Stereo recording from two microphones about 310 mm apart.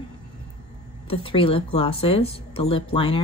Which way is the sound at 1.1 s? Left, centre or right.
Centre.